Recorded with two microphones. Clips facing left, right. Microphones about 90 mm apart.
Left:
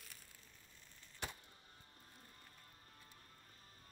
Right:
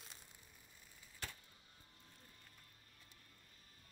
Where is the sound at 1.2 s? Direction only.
20° left (ahead or behind).